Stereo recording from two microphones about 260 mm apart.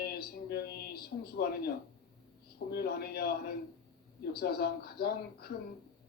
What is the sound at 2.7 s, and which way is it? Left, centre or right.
Speech, left.